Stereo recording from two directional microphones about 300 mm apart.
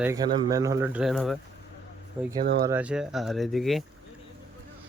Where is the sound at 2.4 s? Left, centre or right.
Right.